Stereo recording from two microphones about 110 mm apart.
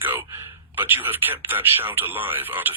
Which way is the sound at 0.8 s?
20° right (ahead or behind).